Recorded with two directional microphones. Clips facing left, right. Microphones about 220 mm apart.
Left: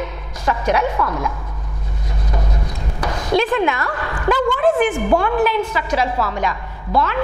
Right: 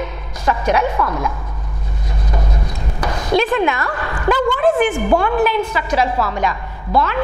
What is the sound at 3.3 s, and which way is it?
A woman's voice, 10° right (ahead or behind).